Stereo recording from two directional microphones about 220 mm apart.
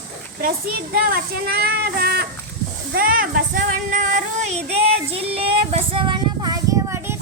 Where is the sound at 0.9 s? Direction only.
45° right (ahead or behind).